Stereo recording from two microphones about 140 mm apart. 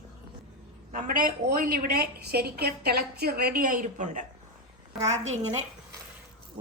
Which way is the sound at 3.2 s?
90° right.